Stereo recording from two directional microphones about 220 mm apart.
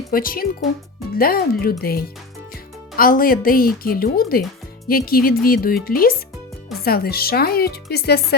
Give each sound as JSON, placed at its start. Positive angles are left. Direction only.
{"t": 0.1, "sound": "speech", "side_deg": 40}